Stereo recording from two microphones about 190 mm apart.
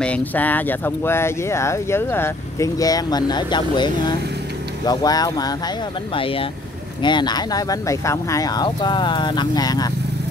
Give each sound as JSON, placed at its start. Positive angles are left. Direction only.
{"t": 0.0, "sound": "speech", "side_deg": 5}